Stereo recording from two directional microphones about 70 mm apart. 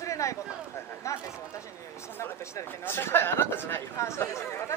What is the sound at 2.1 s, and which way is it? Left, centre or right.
Speech, left.